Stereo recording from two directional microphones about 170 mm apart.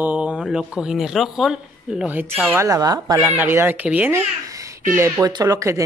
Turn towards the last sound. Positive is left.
turn(degrees=-20)  # may be behind; listen again after turning